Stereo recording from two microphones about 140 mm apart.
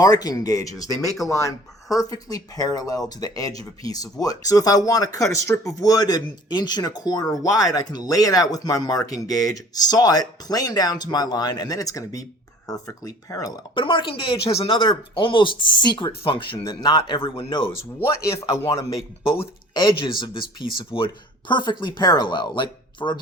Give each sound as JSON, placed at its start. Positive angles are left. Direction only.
{"t": 0.0, "sound": "speech", "side_deg": 25}
{"t": 13.8, "sound": "speech", "side_deg": 40}
{"t": 18.0, "sound": "speech", "side_deg": 20}
{"t": 19.7, "sound": "speech", "side_deg": 35}